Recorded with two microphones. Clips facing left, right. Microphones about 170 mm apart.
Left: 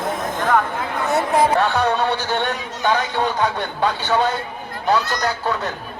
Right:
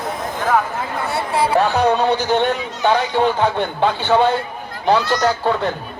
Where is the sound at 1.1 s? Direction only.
45° left (ahead or behind).